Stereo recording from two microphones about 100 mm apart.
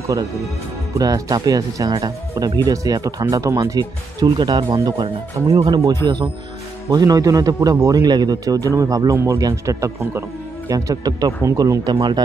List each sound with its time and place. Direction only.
0.9 s speech: 35° right (ahead or behind)
4.4 s speech: 45° right (ahead or behind)
6.0 s speech: 50° right (ahead or behind)
6.9 s speech: 40° right (ahead or behind)